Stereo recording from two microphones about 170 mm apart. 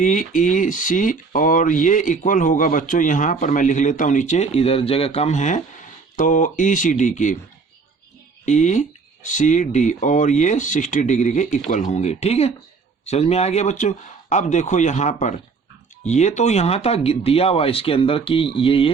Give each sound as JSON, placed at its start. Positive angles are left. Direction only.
{"t": 0.0, "sound": "speech", "side_deg": 50}
{"t": 8.4, "sound": "speech", "side_deg": 45}